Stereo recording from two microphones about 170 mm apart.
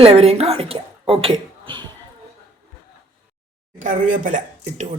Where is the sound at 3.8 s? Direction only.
50° right (ahead or behind).